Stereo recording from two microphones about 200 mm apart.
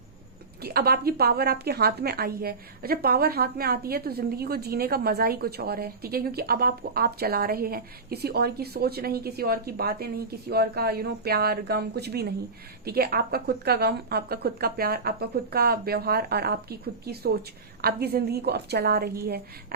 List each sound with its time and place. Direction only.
0.6 s a woman's voice: 50° right (ahead or behind)